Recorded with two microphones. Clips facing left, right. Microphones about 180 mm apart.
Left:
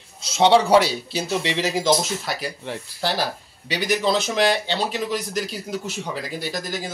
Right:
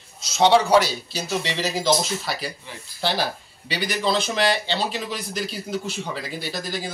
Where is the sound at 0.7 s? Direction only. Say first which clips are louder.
Left 2 dB; 30° left (ahead or behind).